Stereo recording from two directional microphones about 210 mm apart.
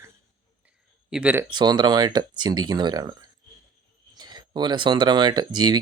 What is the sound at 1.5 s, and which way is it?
Speech, 20° right (ahead or behind).